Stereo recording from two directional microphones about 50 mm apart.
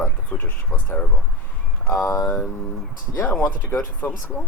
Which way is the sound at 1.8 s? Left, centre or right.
Left.